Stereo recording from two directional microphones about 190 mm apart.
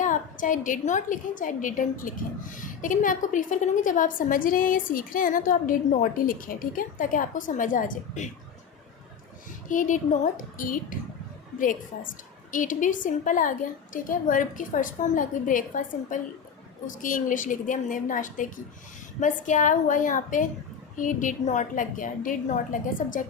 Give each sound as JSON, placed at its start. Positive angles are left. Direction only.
{"t": 0.0, "sound": "a woman's voice", "side_deg": 45}
{"t": 9.6, "sound": "a woman's voice", "side_deg": 45}
{"t": 12.5, "sound": "a woman's voice", "side_deg": 45}